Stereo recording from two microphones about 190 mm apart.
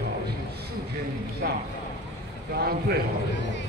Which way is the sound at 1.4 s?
55° right (ahead or behind).